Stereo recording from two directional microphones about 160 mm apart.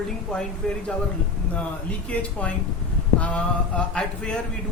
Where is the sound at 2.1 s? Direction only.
5° left (ahead or behind).